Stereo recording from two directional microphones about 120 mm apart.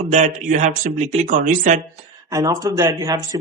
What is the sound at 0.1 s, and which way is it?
Speech, 75° right (ahead or behind).